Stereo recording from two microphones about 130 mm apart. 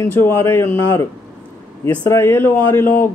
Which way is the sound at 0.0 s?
20° left (ahead or behind).